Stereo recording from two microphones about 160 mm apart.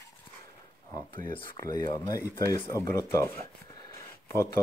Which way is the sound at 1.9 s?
20° left (ahead or behind).